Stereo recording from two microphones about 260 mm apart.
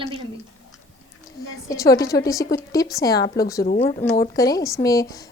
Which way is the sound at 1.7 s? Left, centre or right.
Centre.